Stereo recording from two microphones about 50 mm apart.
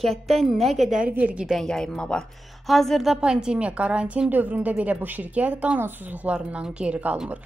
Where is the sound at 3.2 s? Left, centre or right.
Centre.